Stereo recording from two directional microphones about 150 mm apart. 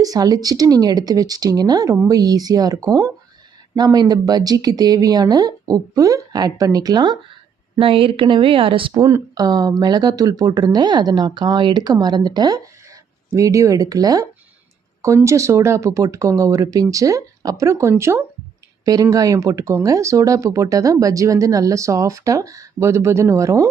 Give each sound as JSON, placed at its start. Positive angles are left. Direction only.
{"t": 0.0, "sound": "speech", "side_deg": -25}
{"t": 9.0, "sound": "speech", "side_deg": -20}